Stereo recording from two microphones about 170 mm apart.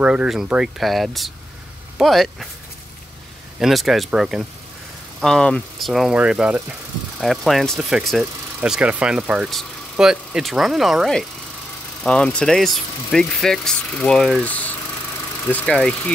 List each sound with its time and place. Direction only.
0.0 s speech: 5° right (ahead or behind)
3.5 s speech: centre (ahead or behind)